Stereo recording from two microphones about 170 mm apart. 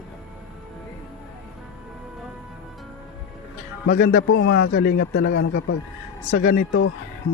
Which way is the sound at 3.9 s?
70° left (ahead or behind).